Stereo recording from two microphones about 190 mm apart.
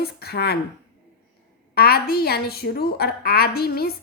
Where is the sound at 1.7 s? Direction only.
55° left (ahead or behind).